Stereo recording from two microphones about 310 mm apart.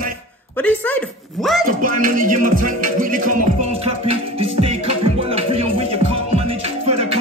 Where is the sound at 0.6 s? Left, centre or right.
Centre.